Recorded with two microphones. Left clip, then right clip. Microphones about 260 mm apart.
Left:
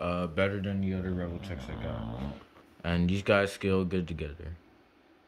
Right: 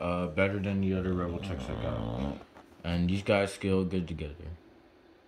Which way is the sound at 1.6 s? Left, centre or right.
Right.